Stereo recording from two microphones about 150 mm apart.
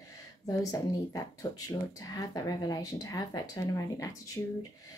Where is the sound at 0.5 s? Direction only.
25° left (ahead or behind).